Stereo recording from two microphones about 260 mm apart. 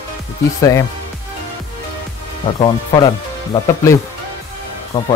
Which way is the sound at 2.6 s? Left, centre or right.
Centre.